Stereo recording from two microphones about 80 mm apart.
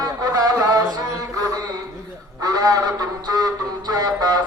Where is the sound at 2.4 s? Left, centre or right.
Right.